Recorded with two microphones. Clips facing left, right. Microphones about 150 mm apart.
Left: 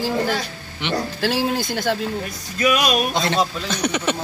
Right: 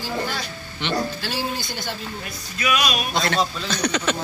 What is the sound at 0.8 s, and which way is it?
Speech, 15° left (ahead or behind).